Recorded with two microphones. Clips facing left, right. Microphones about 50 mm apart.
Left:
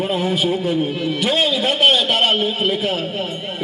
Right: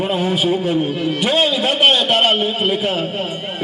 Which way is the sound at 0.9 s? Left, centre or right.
Right.